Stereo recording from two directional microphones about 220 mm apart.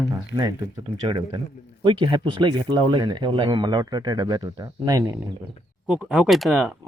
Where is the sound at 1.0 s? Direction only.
20° right (ahead or behind).